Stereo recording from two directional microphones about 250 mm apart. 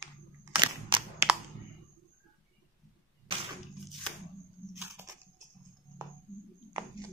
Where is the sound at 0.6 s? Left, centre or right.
Centre.